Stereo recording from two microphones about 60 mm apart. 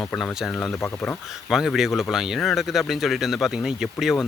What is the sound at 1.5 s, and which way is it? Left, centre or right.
Speech, centre.